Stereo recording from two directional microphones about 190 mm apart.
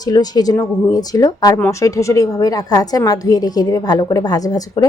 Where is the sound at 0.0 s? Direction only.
20° left (ahead or behind).